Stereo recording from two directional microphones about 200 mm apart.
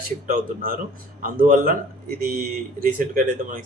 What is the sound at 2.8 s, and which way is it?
Speech, 40° right (ahead or behind).